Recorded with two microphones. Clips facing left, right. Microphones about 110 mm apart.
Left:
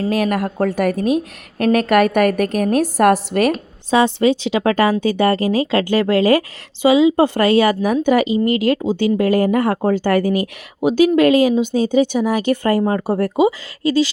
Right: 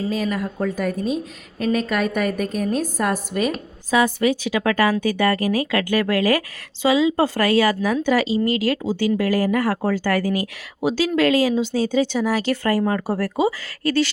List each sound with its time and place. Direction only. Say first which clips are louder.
0.0 s a woman's voice: left 5 dB; 65° left (ahead or behind)
3.9 s speech: left 4 dB; 25° left (ahead or behind)